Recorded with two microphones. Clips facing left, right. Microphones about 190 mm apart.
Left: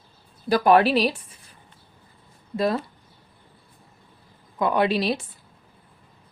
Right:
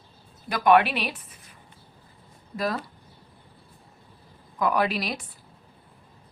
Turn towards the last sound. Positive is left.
turn(degrees=25)  # may be behind; listen again after turning